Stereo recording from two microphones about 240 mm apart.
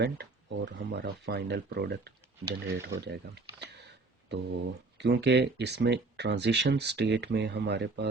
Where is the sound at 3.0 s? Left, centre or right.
Right.